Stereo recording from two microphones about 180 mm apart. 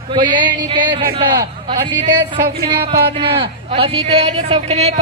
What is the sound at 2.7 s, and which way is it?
A man's voice, 30° right (ahead or behind).